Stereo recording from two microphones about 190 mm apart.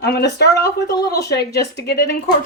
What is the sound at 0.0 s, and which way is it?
Speech, 60° left (ahead or behind).